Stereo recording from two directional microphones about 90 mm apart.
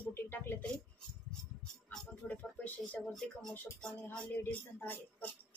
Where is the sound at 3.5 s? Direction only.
20° left (ahead or behind).